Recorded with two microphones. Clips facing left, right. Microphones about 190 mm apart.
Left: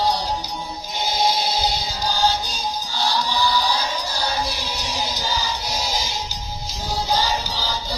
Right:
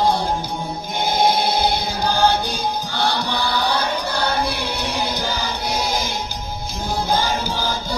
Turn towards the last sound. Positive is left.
turn(degrees=-50)  # may be behind; listen again after turning